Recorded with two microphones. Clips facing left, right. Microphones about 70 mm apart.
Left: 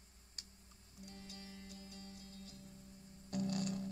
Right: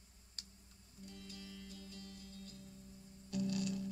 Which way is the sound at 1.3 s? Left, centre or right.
Left.